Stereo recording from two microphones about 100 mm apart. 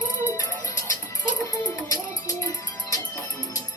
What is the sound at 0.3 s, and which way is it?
Music, 35° left (ahead or behind).